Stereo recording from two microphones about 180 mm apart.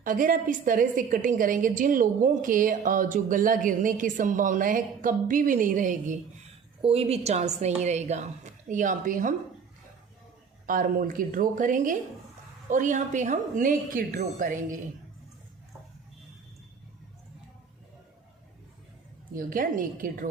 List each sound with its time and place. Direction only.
0.0 s a woman's voice: 50° right (ahead or behind)
6.8 s a woman's voice: 35° right (ahead or behind)
10.7 s a woman's voice: 50° right (ahead or behind)
19.3 s a woman's voice: 50° right (ahead or behind)